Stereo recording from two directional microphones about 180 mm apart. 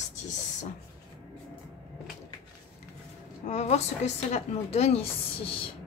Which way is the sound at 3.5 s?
40° left (ahead or behind).